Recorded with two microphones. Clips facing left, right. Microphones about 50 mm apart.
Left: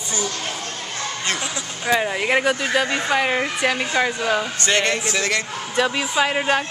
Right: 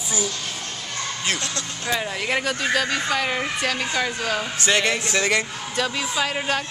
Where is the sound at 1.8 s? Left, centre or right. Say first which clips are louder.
Left 5 dB; centre.